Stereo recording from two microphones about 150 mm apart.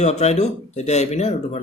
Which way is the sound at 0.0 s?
50° left (ahead or behind).